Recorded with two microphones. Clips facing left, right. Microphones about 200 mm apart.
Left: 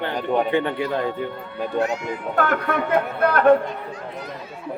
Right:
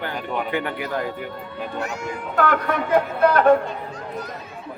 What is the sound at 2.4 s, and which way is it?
A man's voice, 50° left (ahead or behind).